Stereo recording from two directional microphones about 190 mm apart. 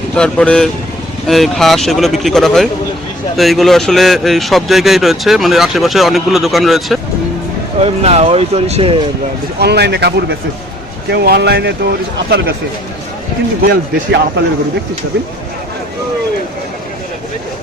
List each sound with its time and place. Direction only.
0.2 s speech: 5° left (ahead or behind)
7.8 s speech: 30° right (ahead or behind)
9.6 s speech: 60° right (ahead or behind)
13.6 s speech: 60° right (ahead or behind)